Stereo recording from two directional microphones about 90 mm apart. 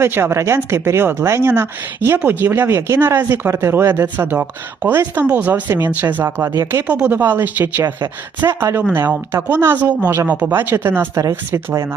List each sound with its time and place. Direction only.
0.0 s speech: 25° right (ahead or behind)
6.2 s speech: 30° right (ahead or behind)
6.8 s speech: 15° right (ahead or behind)
8.4 s speech: 35° right (ahead or behind)
11.2 s speech: 35° right (ahead or behind)